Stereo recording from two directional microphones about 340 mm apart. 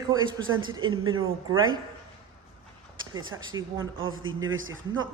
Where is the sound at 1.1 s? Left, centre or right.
Right.